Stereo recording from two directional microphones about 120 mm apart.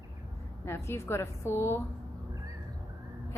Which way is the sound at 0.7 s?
20° left (ahead or behind).